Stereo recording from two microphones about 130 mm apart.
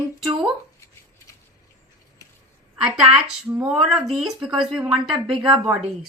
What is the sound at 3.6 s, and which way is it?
Speech, 5° right (ahead or behind).